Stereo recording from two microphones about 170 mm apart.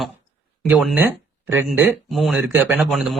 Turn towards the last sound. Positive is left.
turn(degrees=0)  # may be behind; listen again after turning